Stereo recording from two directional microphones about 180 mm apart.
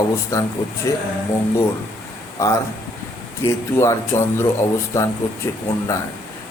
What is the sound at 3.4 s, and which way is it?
Speech, 15° left (ahead or behind).